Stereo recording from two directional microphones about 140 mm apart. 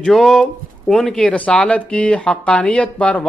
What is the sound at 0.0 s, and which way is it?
Speech, 5° left (ahead or behind).